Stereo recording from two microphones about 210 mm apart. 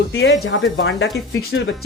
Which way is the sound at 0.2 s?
55° left (ahead or behind).